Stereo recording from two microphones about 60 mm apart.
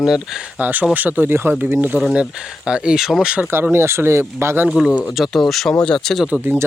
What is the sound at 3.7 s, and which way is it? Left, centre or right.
Speech, right.